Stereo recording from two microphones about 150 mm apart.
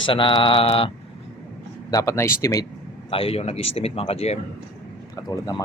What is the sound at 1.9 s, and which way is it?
Speech, 20° left (ahead or behind).